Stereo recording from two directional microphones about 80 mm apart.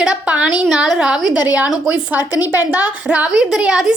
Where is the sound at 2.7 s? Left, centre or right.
Centre.